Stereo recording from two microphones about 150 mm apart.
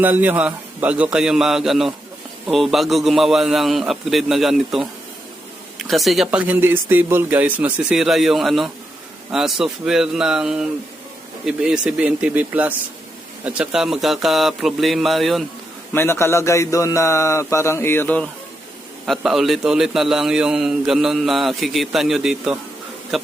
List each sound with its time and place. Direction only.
0.0 s a man's voice: 10° right (ahead or behind)
15.9 s speech: 15° left (ahead or behind)
19.0 s a man's voice: centre (ahead or behind)